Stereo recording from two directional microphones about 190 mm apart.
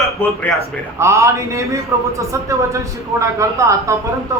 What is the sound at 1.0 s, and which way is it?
A man's voice, 15° right (ahead or behind).